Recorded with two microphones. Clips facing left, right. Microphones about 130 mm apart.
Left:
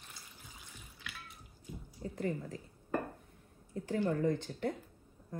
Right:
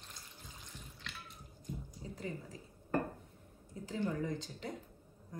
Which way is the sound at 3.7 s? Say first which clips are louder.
Left 6 dB; 55° left (ahead or behind).